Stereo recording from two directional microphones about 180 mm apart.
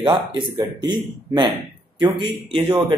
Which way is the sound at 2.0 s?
25° right (ahead or behind).